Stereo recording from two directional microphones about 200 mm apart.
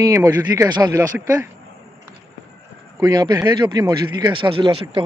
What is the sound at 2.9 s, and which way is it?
Speech, 20° right (ahead or behind).